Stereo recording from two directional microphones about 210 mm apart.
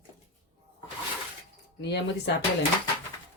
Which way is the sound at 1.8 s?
55° left (ahead or behind).